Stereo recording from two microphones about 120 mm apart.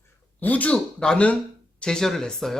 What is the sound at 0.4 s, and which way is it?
A man's voice, 10° left (ahead or behind).